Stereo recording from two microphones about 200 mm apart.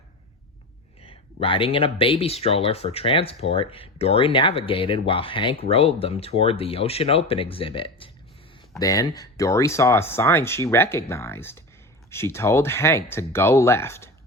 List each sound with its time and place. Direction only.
1.0 s speech: 25° left (ahead or behind)